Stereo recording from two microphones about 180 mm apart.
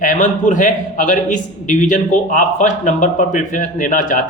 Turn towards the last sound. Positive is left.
turn(degrees=45)  # may be behind; listen again after turning